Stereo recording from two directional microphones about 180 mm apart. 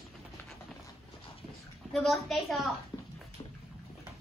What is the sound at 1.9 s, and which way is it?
Speech, centre (ahead or behind).